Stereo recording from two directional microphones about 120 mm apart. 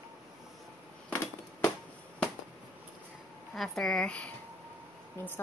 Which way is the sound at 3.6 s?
5° left (ahead or behind).